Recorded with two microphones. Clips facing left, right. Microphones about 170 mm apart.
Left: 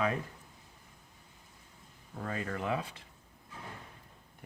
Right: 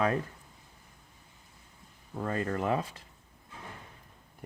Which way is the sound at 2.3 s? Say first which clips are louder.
Right 5 dB; 40° right (ahead or behind).